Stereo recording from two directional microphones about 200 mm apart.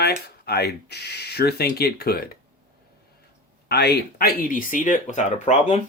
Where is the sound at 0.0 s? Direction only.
55° left (ahead or behind).